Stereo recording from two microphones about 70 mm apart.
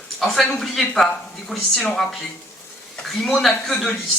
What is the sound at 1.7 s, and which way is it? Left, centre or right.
Speech, centre.